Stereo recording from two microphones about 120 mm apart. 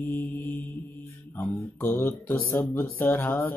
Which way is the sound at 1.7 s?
15° left (ahead or behind).